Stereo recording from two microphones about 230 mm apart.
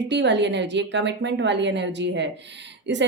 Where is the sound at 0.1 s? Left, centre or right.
Right.